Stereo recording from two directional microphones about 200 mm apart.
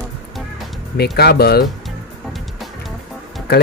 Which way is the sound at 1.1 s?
55° left (ahead or behind).